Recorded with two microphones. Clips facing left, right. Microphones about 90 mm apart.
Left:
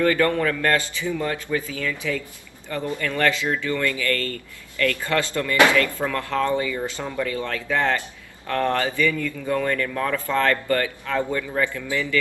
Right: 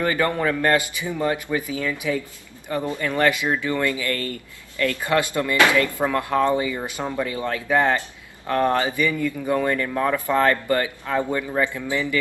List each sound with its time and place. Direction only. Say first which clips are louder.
0.0 s speech: left 2 dB; 20° right (ahead or behind)